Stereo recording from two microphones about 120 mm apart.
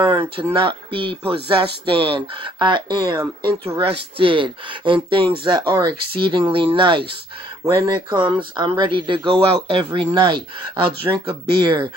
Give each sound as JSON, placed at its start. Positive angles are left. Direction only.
{"t": 0.0, "sound": "speech", "side_deg": -45}
{"t": 7.6, "sound": "speech", "side_deg": -30}